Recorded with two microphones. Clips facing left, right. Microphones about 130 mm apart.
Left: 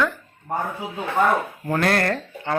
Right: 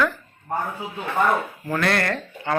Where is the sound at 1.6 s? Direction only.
45° left (ahead or behind).